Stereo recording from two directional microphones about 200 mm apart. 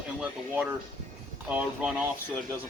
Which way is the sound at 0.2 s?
5° right (ahead or behind).